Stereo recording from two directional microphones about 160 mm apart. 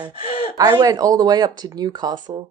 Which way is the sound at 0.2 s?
35° left (ahead or behind).